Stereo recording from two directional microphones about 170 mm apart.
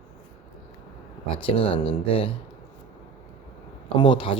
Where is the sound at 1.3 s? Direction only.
35° left (ahead or behind).